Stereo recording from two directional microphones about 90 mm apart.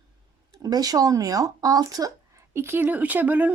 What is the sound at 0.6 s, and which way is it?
Speech, 45° right (ahead or behind).